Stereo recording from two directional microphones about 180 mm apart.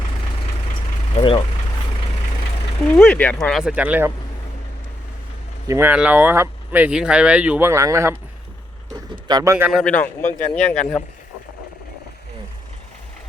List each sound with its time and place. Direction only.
1.1 s speech: 30° left (ahead or behind)
2.9 s speech: 10° left (ahead or behind); by 4.1 s 10° right (ahead or behind)
5.6 s speech: 15° right (ahead or behind)
9.2 s speech: 20° right (ahead or behind)
9.8 s speech: 10° left (ahead or behind)